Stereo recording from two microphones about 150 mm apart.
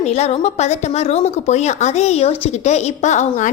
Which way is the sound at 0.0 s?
45° left (ahead or behind).